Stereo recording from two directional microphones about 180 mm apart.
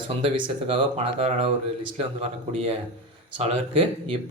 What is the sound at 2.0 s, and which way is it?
Speech, 35° right (ahead or behind).